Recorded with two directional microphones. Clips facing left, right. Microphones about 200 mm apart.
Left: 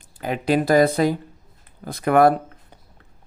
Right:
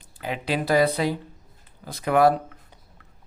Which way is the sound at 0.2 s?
45° left (ahead or behind).